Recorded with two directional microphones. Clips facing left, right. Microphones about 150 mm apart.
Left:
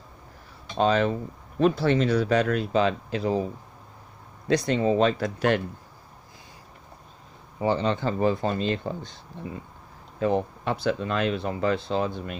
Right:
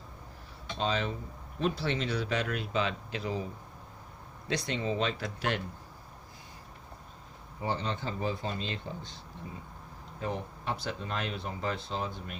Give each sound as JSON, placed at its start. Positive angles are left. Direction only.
{"t": 0.8, "sound": "speech", "side_deg": 55}
{"t": 4.4, "sound": "speech", "side_deg": 45}
{"t": 7.6, "sound": "speech", "side_deg": 90}
{"t": 10.2, "sound": "speech", "side_deg": 90}